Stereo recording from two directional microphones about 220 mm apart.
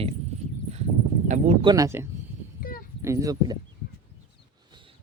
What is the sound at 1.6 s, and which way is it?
Speech, 15° right (ahead or behind).